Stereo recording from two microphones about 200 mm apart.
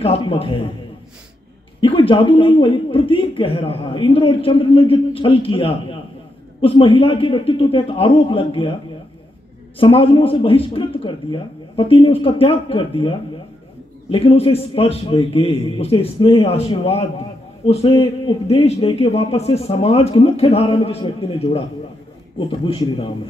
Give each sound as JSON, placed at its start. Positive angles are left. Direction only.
{"t": 0.0, "sound": "a man's voice", "side_deg": 30}
{"t": 1.8, "sound": "a man's voice", "side_deg": 25}
{"t": 9.8, "sound": "a man's voice", "side_deg": 25}